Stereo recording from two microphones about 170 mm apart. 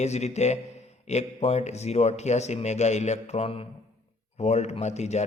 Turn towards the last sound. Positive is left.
turn(degrees=40)  # may be behind; listen again after turning